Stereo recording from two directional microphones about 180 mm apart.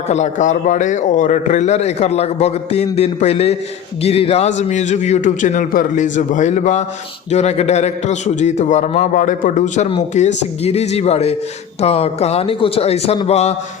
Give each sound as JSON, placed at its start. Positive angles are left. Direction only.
{"t": 0.1, "sound": "a man's voice", "side_deg": 40}